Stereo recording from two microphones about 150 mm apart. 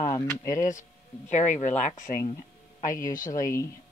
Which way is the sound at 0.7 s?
55° left (ahead or behind).